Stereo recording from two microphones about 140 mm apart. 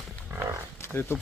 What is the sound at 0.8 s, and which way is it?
Wild animals, 15° left (ahead or behind).